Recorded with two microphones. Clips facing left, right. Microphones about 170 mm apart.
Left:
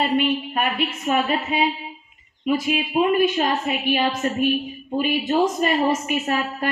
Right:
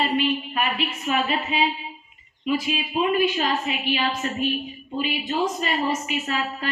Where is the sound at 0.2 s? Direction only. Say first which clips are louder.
Left 2 dB; 50° left (ahead or behind).